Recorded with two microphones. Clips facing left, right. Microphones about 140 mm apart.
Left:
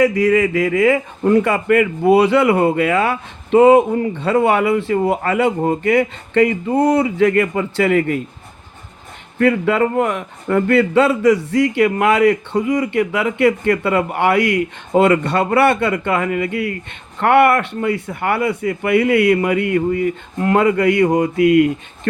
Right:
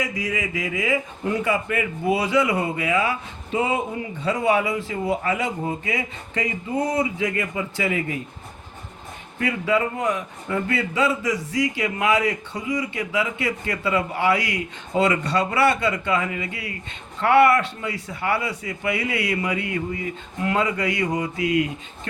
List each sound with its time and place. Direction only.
0.0 s speech: 65° left (ahead or behind)
9.4 s speech: 60° left (ahead or behind)